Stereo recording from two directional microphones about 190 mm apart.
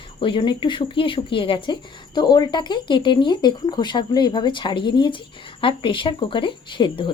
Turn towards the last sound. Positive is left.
turn(degrees=25)  # may be behind; listen again after turning